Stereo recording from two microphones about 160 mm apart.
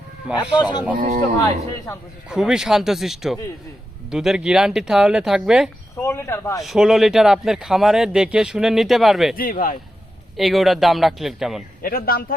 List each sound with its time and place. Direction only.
0.6 s speech: 25° left (ahead or behind)
0.9 s speech: 55° right (ahead or behind)
2.3 s speech: 5° right (ahead or behind)
6.0 s speech: 15° left (ahead or behind)
6.6 s speech: centre (ahead or behind)
9.3 s speech: 65° left (ahead or behind)
10.3 s speech: centre (ahead or behind)
11.8 s speech: 65° left (ahead or behind)